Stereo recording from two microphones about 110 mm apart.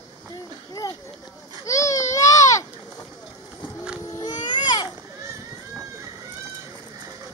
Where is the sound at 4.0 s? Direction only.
35° left (ahead or behind).